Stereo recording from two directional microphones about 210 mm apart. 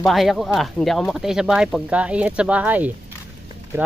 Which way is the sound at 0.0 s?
Centre (ahead or behind).